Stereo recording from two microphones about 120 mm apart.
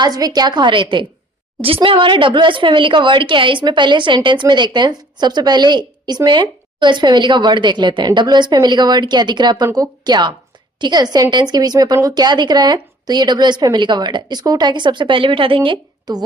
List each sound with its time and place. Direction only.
0.0 s speech: 35° right (ahead or behind)